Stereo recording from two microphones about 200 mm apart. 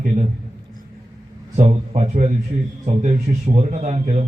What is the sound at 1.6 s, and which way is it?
Speech, 30° right (ahead or behind).